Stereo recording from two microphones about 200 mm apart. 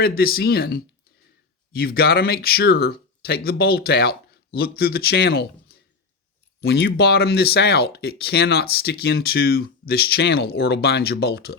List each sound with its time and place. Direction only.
0.0 s speech: 50° left (ahead or behind)